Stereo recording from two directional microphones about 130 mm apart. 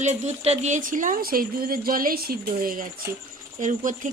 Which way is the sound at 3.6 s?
80° right.